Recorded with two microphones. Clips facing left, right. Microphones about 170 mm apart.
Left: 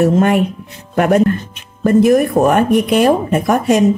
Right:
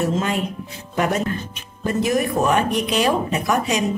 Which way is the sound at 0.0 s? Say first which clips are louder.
Left 9 dB; 60° left (ahead or behind).